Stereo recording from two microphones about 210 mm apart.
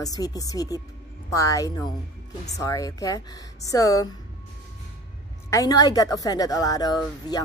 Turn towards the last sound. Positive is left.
turn(degrees=20)  # may be behind; listen again after turning